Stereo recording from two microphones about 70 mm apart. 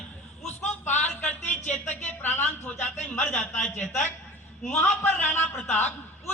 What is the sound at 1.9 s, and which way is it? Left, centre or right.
A man's voice, left.